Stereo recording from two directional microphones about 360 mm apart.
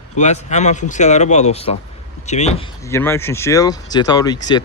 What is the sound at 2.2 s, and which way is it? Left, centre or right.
Speech, centre.